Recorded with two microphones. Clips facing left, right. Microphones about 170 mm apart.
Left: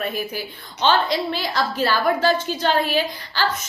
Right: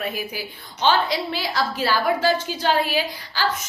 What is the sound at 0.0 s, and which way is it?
A woman's voice, 10° right (ahead or behind).